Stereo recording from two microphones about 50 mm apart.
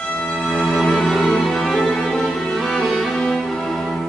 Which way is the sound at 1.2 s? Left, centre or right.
Centre.